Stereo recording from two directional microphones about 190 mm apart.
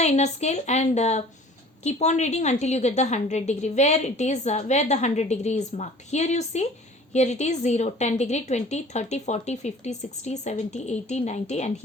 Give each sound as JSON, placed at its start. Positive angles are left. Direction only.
{"t": 0.0, "sound": "a woman's voice", "side_deg": 35}